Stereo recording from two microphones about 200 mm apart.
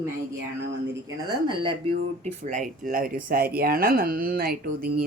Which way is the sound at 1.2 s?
25° right (ahead or behind).